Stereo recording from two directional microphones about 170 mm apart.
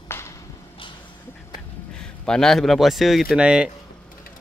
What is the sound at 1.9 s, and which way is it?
A man's voice, 5° left (ahead or behind).